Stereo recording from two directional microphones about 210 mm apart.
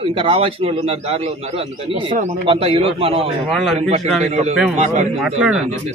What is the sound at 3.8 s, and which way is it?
Speech, 30° right (ahead or behind).